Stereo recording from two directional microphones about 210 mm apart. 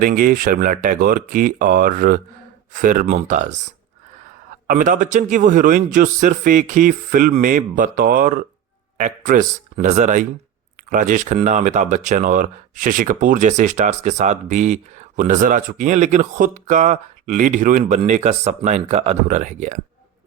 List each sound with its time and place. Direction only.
0.0 s speech: 40° right (ahead or behind)
4.6 s speech: 40° right (ahead or behind)